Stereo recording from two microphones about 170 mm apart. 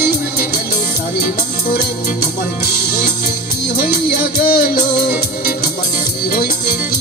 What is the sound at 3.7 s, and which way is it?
Music, 60° left (ahead or behind).